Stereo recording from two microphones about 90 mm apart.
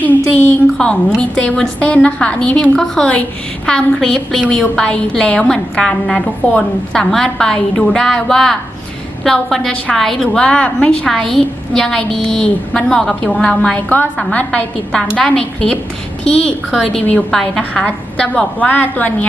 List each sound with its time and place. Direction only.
0.0 s a woman's voice: 20° left (ahead or behind)
0.8 s a woman's voice: 5° left (ahead or behind)